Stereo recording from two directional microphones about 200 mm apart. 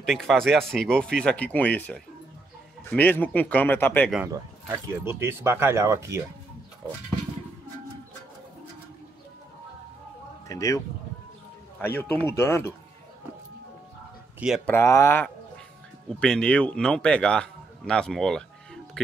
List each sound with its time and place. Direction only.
0.0 s a man's voice: centre (ahead or behind)
4.3 s speech: 15° right (ahead or behind)
10.5 s speech: 15° left (ahead or behind)
11.8 s speech: 10° left (ahead or behind)
14.7 s a man's voice: 15° left (ahead or behind)